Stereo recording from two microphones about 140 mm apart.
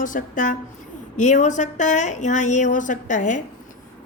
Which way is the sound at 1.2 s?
60° left (ahead or behind).